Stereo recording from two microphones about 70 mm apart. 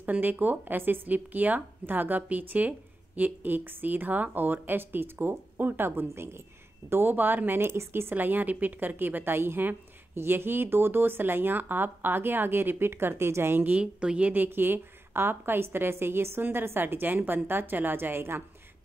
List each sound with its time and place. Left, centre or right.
0.0 s a woman's voice: right
13.7 s a woman's voice: centre; by 18.4 s right